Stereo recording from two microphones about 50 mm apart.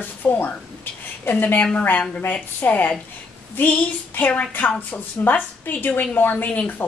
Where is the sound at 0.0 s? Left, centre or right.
Left.